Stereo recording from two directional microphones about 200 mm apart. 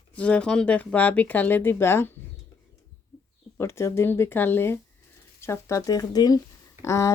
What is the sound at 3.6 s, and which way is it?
A woman's voice, 15° left (ahead or behind).